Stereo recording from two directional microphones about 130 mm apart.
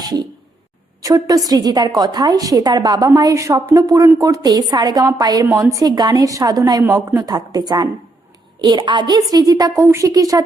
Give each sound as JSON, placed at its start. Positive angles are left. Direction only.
{"t": 1.0, "sound": "a woman's voice", "side_deg": -25}